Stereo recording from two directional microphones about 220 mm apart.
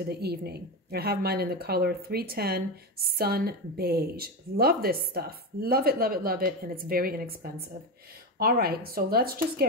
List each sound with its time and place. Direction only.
0.0 s speech: 45° right (ahead or behind)